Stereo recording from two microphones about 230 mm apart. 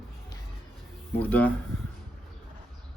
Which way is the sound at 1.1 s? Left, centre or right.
Centre.